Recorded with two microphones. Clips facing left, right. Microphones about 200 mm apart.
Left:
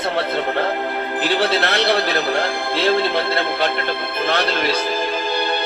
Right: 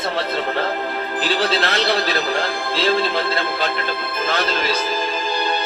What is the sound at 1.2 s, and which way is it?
Speech, 55° left (ahead or behind).